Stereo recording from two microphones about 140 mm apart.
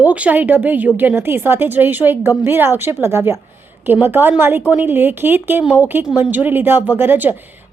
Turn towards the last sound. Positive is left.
turn(degrees=-15)  # may be behind; listen again after turning